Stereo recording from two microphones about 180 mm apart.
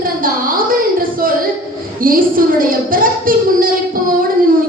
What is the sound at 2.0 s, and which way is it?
A woman's voice, 50° right (ahead or behind).